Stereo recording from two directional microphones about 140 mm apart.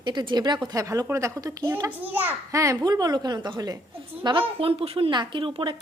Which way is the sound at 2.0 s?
10° right (ahead or behind).